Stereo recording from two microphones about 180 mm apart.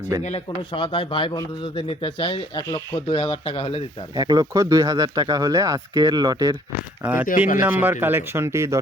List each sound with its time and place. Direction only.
0.2 s speech: 40° left (ahead or behind)
0.7 s speech: 30° left (ahead or behind)
4.1 s speech: 20° right (ahead or behind)
7.0 s speech: 10° right (ahead or behind)
7.3 s speech: 45° left (ahead or behind)
7.6 s speech: 10° right (ahead or behind)